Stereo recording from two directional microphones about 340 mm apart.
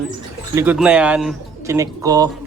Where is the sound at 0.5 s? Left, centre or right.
Centre.